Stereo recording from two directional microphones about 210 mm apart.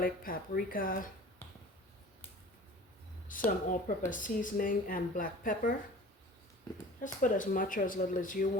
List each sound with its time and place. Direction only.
0.0 s speech: 45° left (ahead or behind)
3.2 s speech: 40° left (ahead or behind)
7.0 s speech: 40° left (ahead or behind)